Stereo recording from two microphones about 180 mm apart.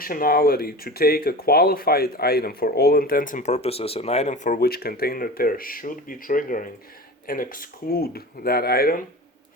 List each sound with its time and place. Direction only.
0.0 s speech: 55° left (ahead or behind)